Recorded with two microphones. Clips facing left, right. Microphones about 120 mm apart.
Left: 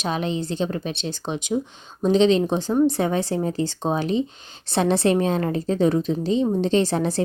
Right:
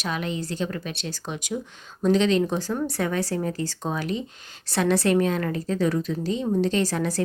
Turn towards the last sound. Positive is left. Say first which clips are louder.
# left 4 dB
turn(degrees=25)  # may be behind; listen again after turning